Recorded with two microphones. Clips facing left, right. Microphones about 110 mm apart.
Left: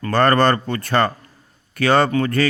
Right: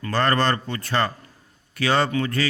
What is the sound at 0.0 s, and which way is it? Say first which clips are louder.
Speech: left 6 dB; 55° left (ahead or behind).